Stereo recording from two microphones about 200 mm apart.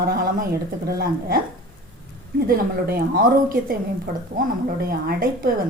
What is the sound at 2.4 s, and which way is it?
A woman's voice, 50° right (ahead or behind).